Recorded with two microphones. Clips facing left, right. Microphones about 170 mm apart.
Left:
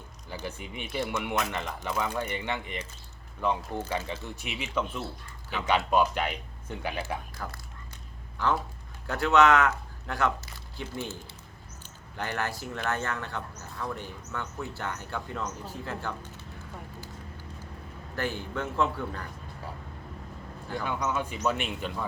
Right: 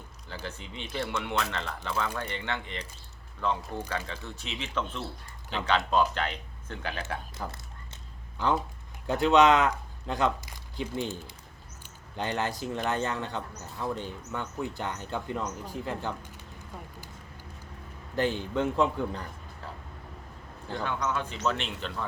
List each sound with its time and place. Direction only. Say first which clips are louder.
0.3 s speech: left 2 dB; 15° left (ahead or behind)
7.4 s speech: right 1 dB; 15° right (ahead or behind)
18.2 s speech: right 5 dB; 20° right (ahead or behind)
20.8 s speech: even; 10° left (ahead or behind)